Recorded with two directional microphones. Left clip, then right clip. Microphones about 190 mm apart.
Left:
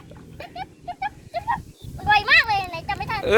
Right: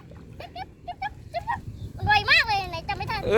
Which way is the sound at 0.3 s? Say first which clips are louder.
Left 3 dB; 15° right (ahead or behind).